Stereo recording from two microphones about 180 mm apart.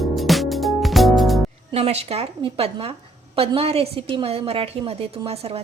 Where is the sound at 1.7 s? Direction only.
35° right (ahead or behind).